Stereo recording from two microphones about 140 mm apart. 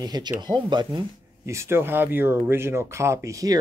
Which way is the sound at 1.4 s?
20° right (ahead or behind).